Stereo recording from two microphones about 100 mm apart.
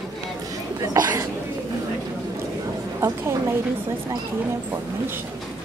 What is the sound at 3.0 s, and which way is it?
Speech, 25° right (ahead or behind).